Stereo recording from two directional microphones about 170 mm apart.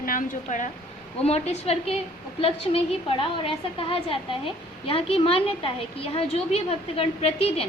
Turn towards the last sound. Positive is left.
turn(degrees=35)  # may be behind; listen again after turning